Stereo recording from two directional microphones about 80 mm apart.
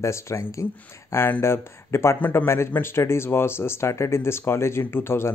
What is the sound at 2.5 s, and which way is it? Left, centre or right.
Speech, left.